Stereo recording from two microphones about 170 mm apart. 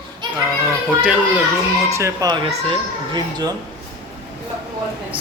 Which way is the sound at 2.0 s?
20° right (ahead or behind).